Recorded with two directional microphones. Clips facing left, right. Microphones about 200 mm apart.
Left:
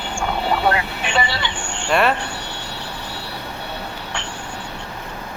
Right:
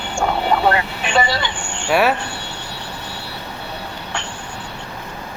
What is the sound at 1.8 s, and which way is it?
Speech, 5° right (ahead or behind).